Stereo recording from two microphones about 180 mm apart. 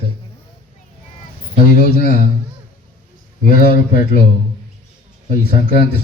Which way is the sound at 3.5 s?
60° left (ahead or behind).